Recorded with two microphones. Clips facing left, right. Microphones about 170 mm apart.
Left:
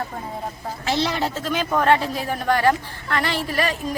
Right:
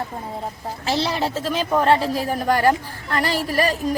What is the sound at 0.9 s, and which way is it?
Speech, 35° right (ahead or behind).